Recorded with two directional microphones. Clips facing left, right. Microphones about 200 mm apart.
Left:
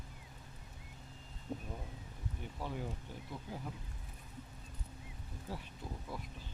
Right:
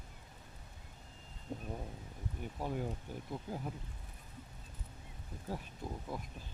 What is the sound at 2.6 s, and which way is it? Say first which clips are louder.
Speech: right 4 dB; 45° right (ahead or behind).